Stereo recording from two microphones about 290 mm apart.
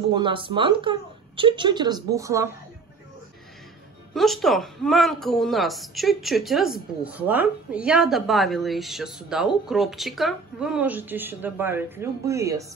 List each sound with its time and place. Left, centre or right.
0.1 s a woman's voice: centre
4.1 s a woman's voice: centre